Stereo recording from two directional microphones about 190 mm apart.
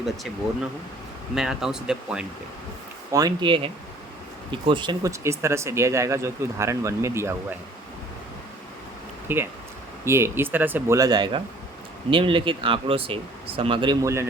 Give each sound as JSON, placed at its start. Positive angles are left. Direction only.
{"t": 1.4, "sound": "speech", "side_deg": 0}
{"t": 3.1, "sound": "speech", "side_deg": -20}
{"t": 9.2, "sound": "speech", "side_deg": -10}